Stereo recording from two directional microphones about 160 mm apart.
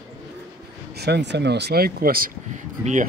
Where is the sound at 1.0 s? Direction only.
90° right; by 2.3 s 65° right (ahead or behind).